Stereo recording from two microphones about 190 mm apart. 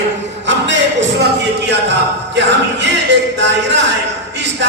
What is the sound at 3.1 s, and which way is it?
Speech, 70° right (ahead or behind).